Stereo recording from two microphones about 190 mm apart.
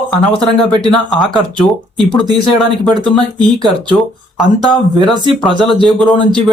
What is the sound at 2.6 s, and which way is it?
Speech, 5° left (ahead or behind).